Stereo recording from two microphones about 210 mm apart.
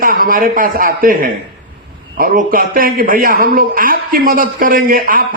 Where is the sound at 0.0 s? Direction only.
45° right (ahead or behind).